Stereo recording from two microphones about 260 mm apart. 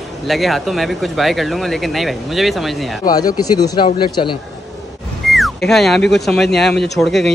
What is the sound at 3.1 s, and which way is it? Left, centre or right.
Speech, centre.